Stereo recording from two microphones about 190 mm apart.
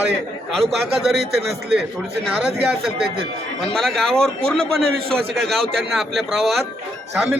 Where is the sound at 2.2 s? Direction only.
Centre (ahead or behind).